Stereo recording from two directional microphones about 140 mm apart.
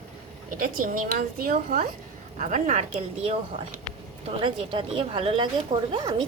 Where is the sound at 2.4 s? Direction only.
65° right (ahead or behind); by 3.4 s 45° right (ahead or behind).